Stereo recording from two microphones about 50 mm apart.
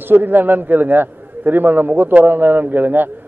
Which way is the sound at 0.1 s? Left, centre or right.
Right.